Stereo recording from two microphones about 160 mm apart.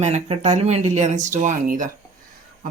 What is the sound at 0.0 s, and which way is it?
Speech, 45° right (ahead or behind).